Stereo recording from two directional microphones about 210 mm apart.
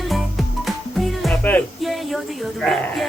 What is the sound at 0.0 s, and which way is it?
Music, centre (ahead or behind).